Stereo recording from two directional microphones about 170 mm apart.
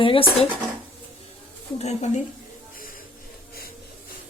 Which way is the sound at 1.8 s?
40° left (ahead or behind).